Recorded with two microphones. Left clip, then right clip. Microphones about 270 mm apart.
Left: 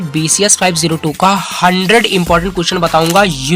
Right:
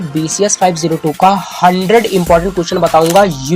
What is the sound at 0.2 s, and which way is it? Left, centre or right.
Speech, left.